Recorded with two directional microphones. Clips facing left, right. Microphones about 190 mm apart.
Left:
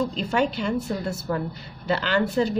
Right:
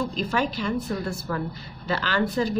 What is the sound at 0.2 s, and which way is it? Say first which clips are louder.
A woman's voice: left 2 dB; 25° left (ahead or behind).